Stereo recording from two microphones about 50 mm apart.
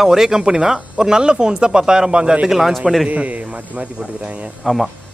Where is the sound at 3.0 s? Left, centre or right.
Right.